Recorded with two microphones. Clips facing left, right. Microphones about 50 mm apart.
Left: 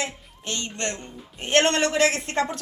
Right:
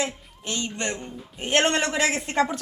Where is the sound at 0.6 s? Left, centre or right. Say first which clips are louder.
Right 2 dB; centre.